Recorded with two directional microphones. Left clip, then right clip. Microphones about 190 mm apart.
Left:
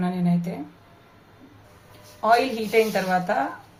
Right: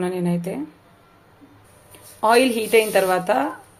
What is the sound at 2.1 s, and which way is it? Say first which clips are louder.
Speech: right 3 dB; 50° right (ahead or behind).